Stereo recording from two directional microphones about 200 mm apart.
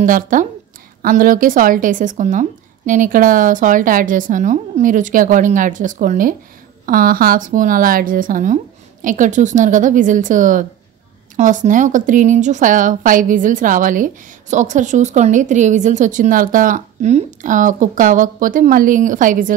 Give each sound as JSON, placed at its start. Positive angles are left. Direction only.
{"t": 0.0, "sound": "speech", "side_deg": -40}